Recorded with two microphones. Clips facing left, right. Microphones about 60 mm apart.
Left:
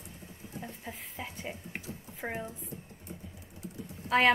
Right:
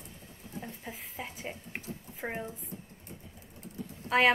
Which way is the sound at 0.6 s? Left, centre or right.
Centre.